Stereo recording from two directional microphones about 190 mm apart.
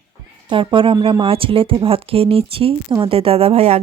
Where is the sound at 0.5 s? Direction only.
25° right (ahead or behind).